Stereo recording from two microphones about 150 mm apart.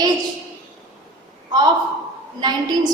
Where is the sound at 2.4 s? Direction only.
30° right (ahead or behind).